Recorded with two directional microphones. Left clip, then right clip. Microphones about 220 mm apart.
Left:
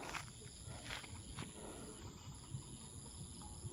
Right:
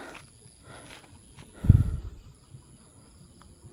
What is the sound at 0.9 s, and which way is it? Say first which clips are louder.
Wild animals: even; 10° right (ahead or behind).